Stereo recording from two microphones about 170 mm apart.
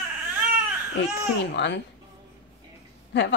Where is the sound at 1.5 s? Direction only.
90° left.